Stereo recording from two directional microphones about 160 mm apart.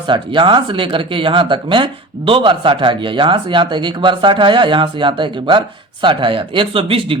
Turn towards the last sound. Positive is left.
turn(degrees=-35)  # may be behind; listen again after turning